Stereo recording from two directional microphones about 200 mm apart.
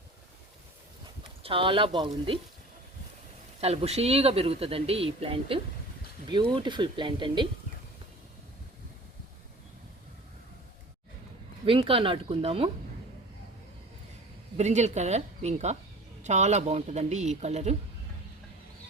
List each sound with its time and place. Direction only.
1.4 s speech: 25° right (ahead or behind)
3.6 s speech: 30° right (ahead or behind)
11.6 s speech: 25° right (ahead or behind)
14.5 s speech: 35° right (ahead or behind)